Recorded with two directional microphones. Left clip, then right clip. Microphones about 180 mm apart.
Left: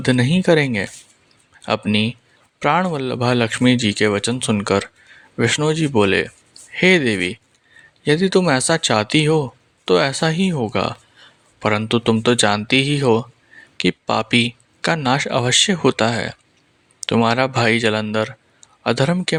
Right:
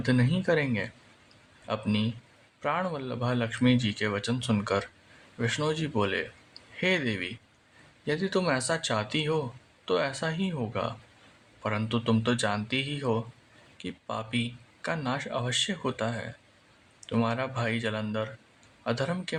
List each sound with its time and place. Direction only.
0.0 s speech: 45° left (ahead or behind)